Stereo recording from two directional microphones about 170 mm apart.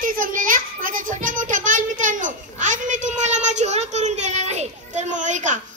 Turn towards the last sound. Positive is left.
turn(degrees=-45)  # may be behind; listen again after turning